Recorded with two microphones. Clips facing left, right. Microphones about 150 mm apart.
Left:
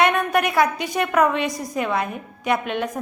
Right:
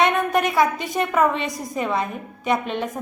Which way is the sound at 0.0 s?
Centre (ahead or behind).